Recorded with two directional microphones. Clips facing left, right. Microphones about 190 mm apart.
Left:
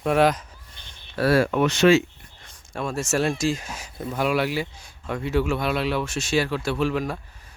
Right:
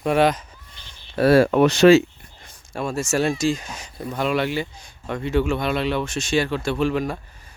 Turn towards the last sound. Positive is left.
turn(degrees=0)  # may be behind; listen again after turning